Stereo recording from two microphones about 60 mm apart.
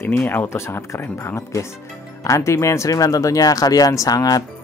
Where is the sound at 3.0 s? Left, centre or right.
Left.